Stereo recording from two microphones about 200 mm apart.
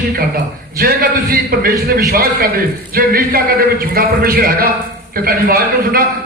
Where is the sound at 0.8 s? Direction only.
50° right (ahead or behind).